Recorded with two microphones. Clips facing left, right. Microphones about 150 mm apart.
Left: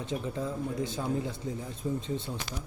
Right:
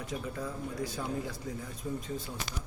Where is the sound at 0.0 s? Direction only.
25° left (ahead or behind).